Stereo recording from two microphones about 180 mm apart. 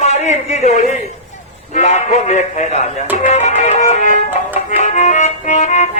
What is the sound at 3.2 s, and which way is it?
Music, 40° left (ahead or behind).